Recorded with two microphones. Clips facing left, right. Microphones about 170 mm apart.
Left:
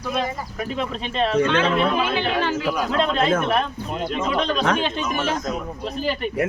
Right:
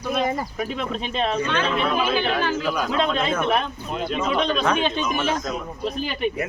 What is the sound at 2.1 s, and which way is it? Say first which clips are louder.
Speech: even; 25° left (ahead or behind).